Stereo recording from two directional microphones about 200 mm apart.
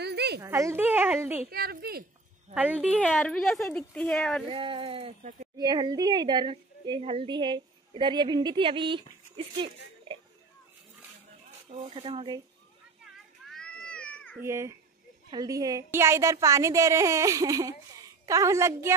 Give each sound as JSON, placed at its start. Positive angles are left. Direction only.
{"t": 0.0, "sound": "a sound", "side_deg": -55}
{"t": 0.4, "sound": "a woman's voice", "side_deg": -15}
{"t": 1.5, "sound": "a woman's voice", "side_deg": -50}
{"t": 2.5, "sound": "a woman's voice", "side_deg": -5}
{"t": 3.0, "sound": "a woman's voice", "side_deg": 5}
{"t": 4.5, "sound": "a woman's voice", "side_deg": -25}
{"t": 11.7, "sound": "a woman's voice", "side_deg": -35}
{"t": 13.5, "sound": "cat", "side_deg": 5}
{"t": 14.4, "sound": "a woman's voice", "side_deg": -15}